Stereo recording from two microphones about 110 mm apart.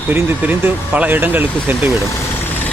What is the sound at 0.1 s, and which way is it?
Speech, 15° right (ahead or behind).